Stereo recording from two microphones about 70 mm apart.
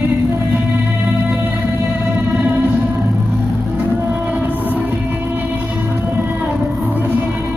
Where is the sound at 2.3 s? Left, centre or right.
Right.